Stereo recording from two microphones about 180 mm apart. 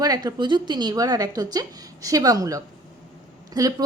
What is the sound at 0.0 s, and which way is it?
A woman's voice, 20° right (ahead or behind).